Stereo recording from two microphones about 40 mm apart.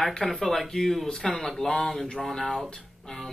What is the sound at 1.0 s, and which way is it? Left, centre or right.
Speech, centre.